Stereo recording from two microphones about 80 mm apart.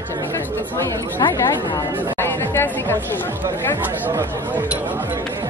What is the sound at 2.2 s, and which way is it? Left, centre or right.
Speech, left.